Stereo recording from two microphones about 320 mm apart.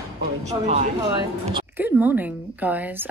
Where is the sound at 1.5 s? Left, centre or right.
Centre.